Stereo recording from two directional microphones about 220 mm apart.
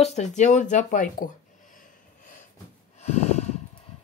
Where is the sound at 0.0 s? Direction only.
30° left (ahead or behind).